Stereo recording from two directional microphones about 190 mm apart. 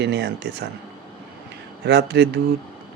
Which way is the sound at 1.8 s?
60° right (ahead or behind).